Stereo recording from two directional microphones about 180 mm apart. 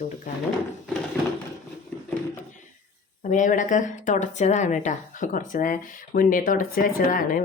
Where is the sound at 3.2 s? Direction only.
45° left (ahead or behind).